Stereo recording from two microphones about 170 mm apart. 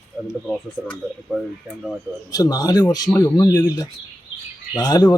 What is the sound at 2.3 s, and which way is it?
Speech, 20° left (ahead or behind).